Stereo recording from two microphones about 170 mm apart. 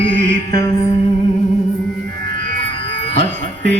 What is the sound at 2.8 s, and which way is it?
Music, 90° right.